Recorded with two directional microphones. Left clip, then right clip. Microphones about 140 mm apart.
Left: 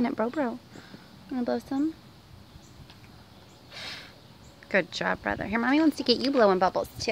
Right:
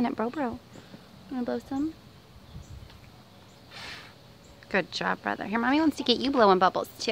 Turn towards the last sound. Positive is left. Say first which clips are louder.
# right 1 dB
turn(degrees=-15)  # may be behind; listen again after turning